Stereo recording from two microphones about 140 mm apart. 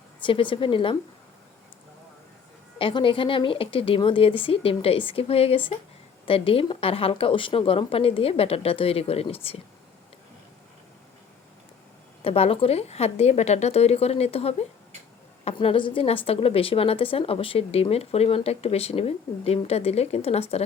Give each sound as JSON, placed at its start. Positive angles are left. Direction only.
{"t": 0.2, "sound": "a woman's voice", "side_deg": 35}
{"t": 2.7, "sound": "a woman's voice", "side_deg": 40}
{"t": 12.2, "sound": "a woman's voice", "side_deg": 45}